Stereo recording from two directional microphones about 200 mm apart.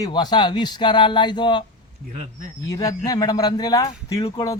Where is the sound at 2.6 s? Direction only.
15° left (ahead or behind).